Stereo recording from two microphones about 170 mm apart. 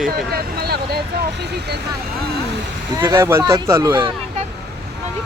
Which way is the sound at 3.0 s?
15° right (ahead or behind).